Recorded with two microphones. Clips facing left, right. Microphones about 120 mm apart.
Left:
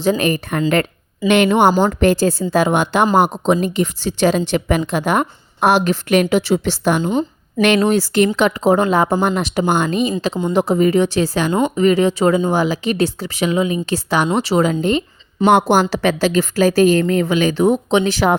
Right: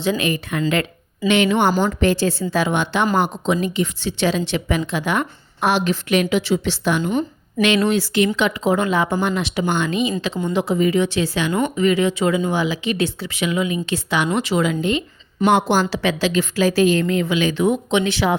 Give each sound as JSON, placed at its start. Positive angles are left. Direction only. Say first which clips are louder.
{"t": 0.0, "sound": "a woman's voice", "louder": "left 4 dB", "side_deg": 45}
{"t": 7.0, "sound": "a woman's voice", "louder": "left 3 dB", "side_deg": 30}
{"t": 7.6, "sound": "a woman's voice", "louder": "left 3 dB", "side_deg": 45}